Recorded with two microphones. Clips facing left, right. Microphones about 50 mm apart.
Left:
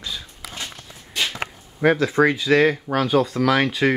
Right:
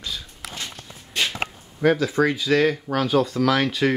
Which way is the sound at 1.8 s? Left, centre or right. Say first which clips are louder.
Left 2 dB; centre.